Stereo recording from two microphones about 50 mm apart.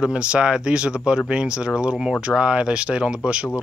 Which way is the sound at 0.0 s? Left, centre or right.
Centre.